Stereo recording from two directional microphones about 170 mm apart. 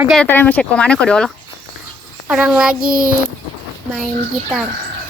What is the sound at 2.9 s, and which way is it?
Speech, 55° right (ahead or behind).